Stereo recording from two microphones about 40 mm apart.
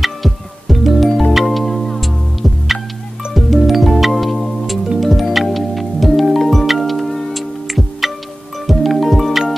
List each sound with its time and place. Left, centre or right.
0.0 s music: centre